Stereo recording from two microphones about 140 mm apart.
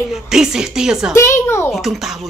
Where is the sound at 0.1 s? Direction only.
5° right (ahead or behind).